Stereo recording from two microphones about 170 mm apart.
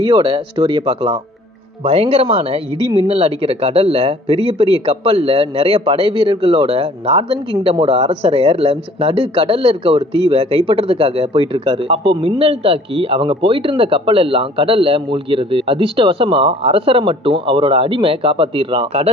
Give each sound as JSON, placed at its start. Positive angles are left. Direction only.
{"t": 0.0, "sound": "speech", "side_deg": -30}